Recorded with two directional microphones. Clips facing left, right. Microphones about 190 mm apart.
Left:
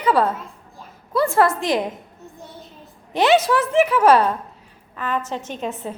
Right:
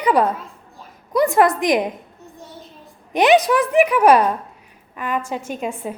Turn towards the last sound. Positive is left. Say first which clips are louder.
# right 2 dB
turn(degrees=-10)  # may be behind; listen again after turning